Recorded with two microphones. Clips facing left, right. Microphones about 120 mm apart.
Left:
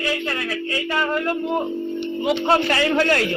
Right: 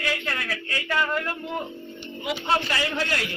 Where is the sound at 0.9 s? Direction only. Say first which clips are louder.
Left 3 dB; 30° left (ahead or behind).